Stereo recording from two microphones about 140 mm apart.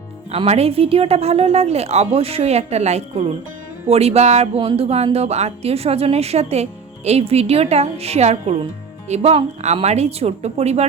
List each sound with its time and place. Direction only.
0.3 s speech: 50° right (ahead or behind)